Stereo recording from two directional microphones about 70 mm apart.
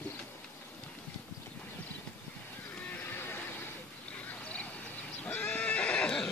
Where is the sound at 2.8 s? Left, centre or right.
Left.